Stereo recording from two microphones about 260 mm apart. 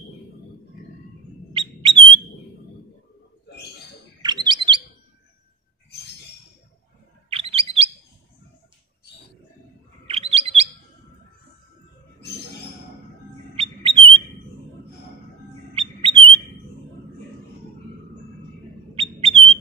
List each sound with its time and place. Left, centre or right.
1.5 s a sound: centre
4.2 s bird: centre
7.2 s bird: right
10.0 s bird: right
13.6 s bird: right
15.7 s bird: right
18.9 s bird: right